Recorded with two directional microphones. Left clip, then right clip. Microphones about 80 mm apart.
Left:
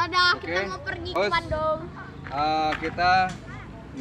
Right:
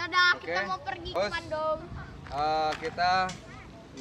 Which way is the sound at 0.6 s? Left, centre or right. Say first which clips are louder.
Left 2 dB; centre.